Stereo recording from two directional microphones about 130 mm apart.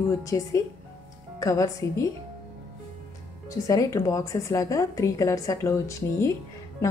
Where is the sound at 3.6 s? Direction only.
25° left (ahead or behind).